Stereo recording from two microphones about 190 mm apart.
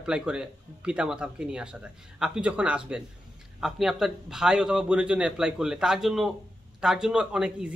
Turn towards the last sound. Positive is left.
turn(degrees=-5)  # may be behind; listen again after turning